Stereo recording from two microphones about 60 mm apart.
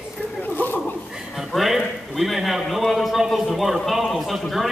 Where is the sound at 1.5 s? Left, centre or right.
Centre.